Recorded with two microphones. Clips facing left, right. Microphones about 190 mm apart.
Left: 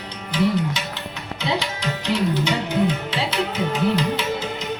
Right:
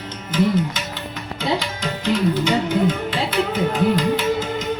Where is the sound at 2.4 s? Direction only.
50° right (ahead or behind).